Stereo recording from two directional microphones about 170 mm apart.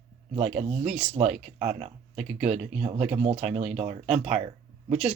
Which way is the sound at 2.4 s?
40° right (ahead or behind).